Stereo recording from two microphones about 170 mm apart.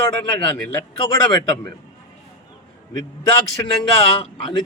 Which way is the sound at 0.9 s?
25° left (ahead or behind).